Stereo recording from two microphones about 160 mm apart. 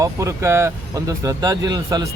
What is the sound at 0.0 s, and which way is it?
Speech, 20° right (ahead or behind).